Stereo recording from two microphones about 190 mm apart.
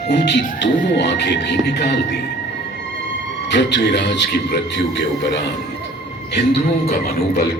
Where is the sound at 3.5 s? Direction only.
65° left (ahead or behind).